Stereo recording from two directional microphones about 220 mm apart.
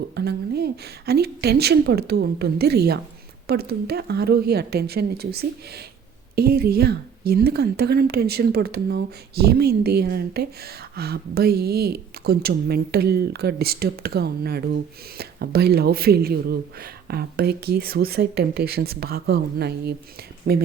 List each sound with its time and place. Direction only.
0.2 s speech: 45° right (ahead or behind)